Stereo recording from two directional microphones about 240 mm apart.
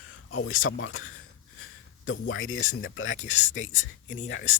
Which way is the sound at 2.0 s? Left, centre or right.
Left.